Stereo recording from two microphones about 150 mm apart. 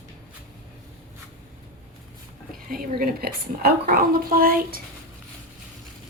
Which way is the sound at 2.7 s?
85° right.